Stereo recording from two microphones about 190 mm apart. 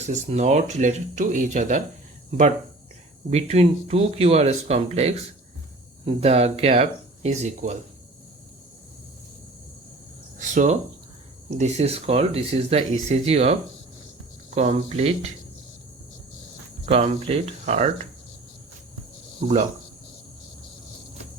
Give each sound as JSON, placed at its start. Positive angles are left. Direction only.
{"t": 0.1, "sound": "speech", "side_deg": -35}
{"t": 3.2, "sound": "speech", "side_deg": -35}
{"t": 10.3, "sound": "speech", "side_deg": -40}
{"t": 16.8, "sound": "speech", "side_deg": -30}